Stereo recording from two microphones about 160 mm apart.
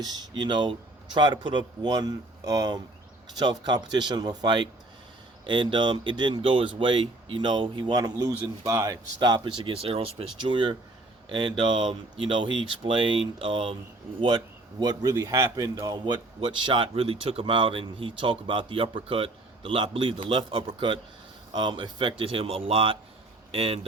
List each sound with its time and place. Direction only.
0.0 s a man's voice: 25° right (ahead or behind)